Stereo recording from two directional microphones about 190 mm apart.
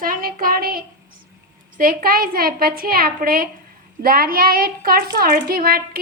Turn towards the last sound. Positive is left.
turn(degrees=-50)  # may be behind; listen again after turning